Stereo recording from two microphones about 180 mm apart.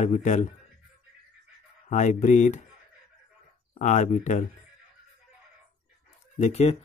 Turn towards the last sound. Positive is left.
turn(degrees=35)  # may be behind; listen again after turning